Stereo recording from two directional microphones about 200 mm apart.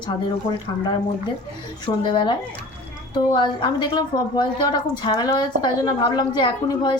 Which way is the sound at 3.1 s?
20° left (ahead or behind).